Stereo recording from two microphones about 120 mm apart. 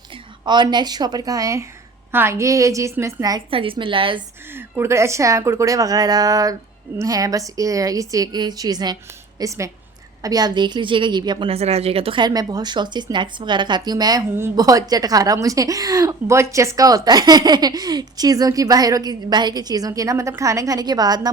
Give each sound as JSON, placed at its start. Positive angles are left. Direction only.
{"t": 0.4, "sound": "a woman's voice", "side_deg": -40}
{"t": 3.5, "sound": "a woman's voice", "side_deg": -45}
{"t": 4.5, "sound": "a woman's voice", "side_deg": -20}
{"t": 11.4, "sound": "a woman's voice", "side_deg": -60}
{"t": 12.2, "sound": "a woman's voice", "side_deg": -35}